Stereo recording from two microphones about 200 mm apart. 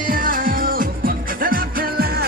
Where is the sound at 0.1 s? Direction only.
45° right (ahead or behind).